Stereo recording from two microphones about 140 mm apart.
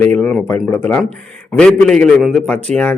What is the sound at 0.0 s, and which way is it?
Speech, 10° left (ahead or behind).